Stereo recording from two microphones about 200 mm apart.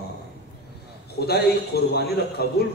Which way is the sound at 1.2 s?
55° left (ahead or behind).